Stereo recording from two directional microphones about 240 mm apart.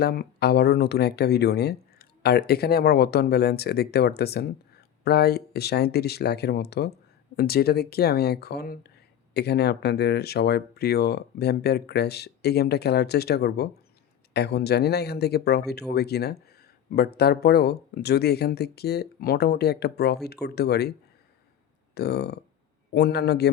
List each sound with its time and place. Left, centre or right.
0.0 s speech: left
21.9 s speech: left